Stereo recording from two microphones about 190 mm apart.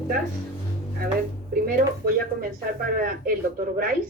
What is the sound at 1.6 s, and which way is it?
Speech, 50° right (ahead or behind).